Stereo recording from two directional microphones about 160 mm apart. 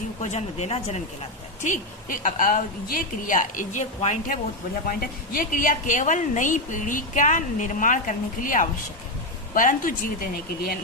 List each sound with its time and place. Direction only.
0.2 s a woman's voice: 45° left (ahead or behind)
4.9 s a woman's voice: 60° left (ahead or behind)